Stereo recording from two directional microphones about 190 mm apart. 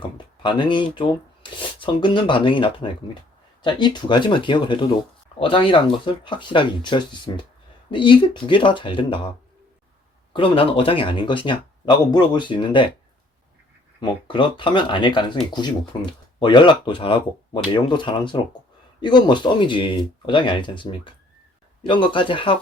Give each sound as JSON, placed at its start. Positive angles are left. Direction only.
{"t": 0.0, "sound": "a sound", "side_deg": 25}
{"t": 0.9, "sound": "speech", "side_deg": 25}
{"t": 10.3, "sound": "speech", "side_deg": 30}
{"t": 14.0, "sound": "speech", "side_deg": 25}